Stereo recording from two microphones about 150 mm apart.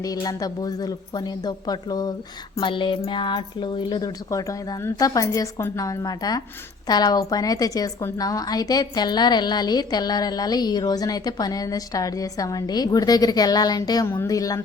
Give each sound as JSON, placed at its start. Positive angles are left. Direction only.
{"t": 0.0, "sound": "a woman's voice", "side_deg": 25}